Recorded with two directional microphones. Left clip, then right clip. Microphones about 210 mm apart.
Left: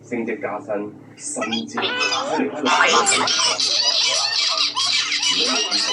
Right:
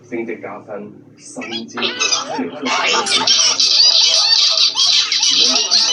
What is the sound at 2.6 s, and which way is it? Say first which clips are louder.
Speech: even; 10° left (ahead or behind).